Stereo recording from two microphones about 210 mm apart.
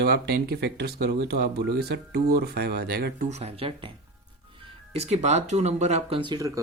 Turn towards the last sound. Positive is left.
turn(degrees=-20)  # may be behind; listen again after turning